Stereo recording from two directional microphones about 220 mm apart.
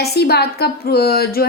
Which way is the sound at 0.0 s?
45° left (ahead or behind).